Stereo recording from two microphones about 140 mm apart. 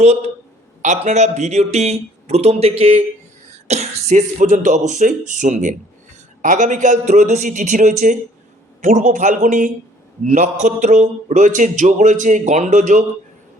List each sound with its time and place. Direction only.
0.0 s speech: 55° right (ahead or behind)
3.7 s speech: 55° right (ahead or behind)